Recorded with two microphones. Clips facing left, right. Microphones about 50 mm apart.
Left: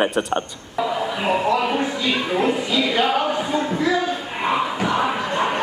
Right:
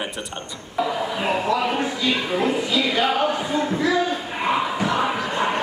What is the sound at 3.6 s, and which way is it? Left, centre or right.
Speech, centre.